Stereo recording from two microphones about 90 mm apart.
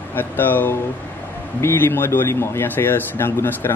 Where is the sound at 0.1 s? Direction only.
20° left (ahead or behind).